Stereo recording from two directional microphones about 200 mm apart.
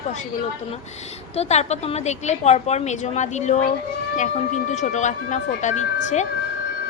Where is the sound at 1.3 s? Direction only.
30° left (ahead or behind).